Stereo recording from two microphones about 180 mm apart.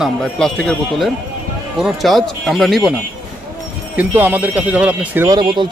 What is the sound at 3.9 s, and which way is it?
Speech, 10° right (ahead or behind).